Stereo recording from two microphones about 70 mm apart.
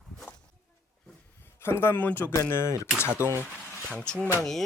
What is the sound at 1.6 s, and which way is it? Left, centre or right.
Speech, left.